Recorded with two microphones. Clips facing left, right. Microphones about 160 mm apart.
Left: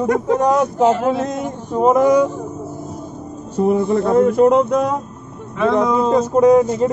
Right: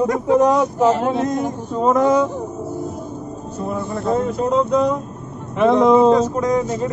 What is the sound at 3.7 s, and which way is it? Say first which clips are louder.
Speech: left 6 dB; 55° left (ahead or behind).